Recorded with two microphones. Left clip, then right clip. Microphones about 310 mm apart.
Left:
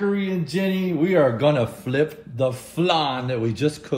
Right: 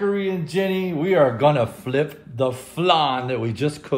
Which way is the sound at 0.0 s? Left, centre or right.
Right.